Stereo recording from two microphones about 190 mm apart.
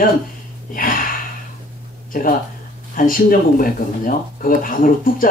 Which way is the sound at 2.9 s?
45° left (ahead or behind).